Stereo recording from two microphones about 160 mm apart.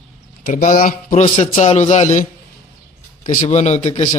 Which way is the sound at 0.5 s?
60° left (ahead or behind).